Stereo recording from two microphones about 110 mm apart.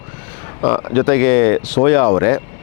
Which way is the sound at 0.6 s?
30° left (ahead or behind).